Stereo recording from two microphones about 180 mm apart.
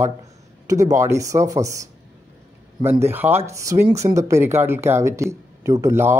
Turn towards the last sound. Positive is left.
turn(degrees=-15)  # may be behind; listen again after turning